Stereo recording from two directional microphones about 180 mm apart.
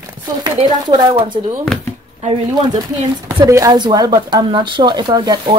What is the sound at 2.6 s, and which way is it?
Speech, 25° right (ahead or behind).